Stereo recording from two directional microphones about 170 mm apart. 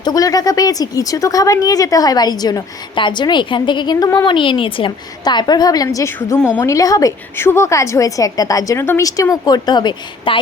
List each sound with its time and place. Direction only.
0.0 s a woman's voice: 20° left (ahead or behind)